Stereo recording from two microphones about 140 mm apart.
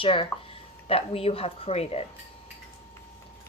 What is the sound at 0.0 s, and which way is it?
Speech, 40° left (ahead or behind).